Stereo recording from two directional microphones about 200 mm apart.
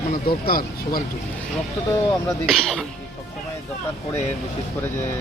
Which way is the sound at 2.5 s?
5° left (ahead or behind).